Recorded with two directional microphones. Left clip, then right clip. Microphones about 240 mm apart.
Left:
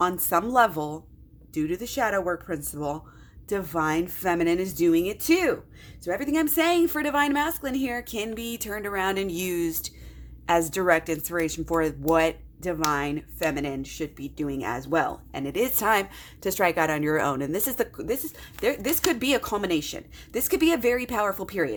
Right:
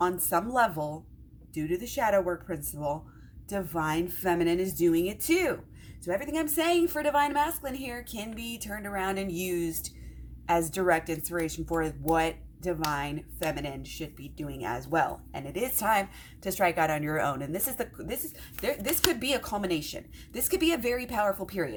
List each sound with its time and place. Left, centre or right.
0.0 s a woman's voice: left